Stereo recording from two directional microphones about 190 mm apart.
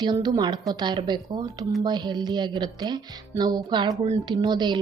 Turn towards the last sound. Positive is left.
turn(degrees=-25)  # may be behind; listen again after turning